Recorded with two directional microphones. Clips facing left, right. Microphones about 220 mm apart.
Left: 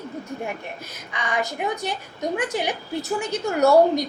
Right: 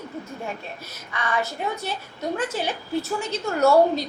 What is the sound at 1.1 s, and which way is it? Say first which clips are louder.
A woman's voice: even; 15° left (ahead or behind).